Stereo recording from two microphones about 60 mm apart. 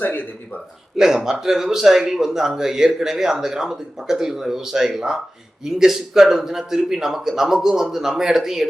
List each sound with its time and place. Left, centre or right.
0.0 s speech: left
0.9 s a man's voice: centre